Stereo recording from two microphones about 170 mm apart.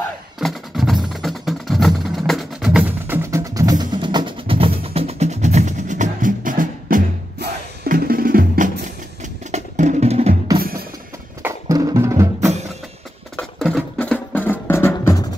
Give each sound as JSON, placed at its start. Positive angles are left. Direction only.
{"t": 0.4, "sound": "music", "side_deg": 0}
{"t": 7.3, "sound": "music", "side_deg": -65}
{"t": 10.6, "sound": "music", "side_deg": -60}
{"t": 11.4, "sound": "music", "side_deg": -20}
{"t": 13.4, "sound": "music", "side_deg": 0}